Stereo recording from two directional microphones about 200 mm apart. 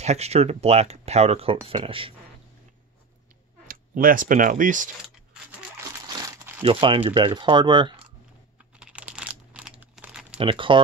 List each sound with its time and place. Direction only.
0.0 s speech: 35° right (ahead or behind)
3.6 s speech: 45° right (ahead or behind)
5.9 s crushing: 15° right (ahead or behind)
6.6 s speech: 25° right (ahead or behind)
8.7 s computer keyboard: 5° right (ahead or behind)
10.3 s speech: 25° right (ahead or behind)